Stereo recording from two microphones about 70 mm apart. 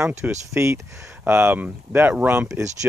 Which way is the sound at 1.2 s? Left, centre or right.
Right.